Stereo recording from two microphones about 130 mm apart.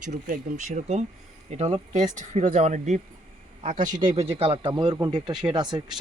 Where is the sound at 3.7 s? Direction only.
75° right (ahead or behind).